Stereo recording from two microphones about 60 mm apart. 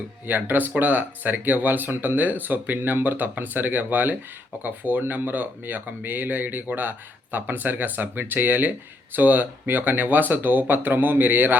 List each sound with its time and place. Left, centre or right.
0.3 s speech: right